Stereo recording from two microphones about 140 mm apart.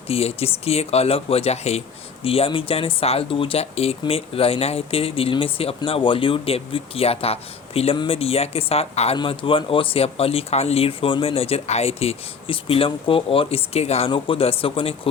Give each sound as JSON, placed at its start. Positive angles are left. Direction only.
{"t": 0.1, "sound": "speech", "side_deg": 45}